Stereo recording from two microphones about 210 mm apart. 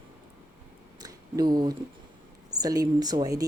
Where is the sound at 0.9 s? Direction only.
20° right (ahead or behind).